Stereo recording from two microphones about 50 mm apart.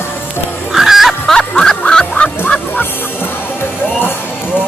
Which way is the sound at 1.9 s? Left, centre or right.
Centre.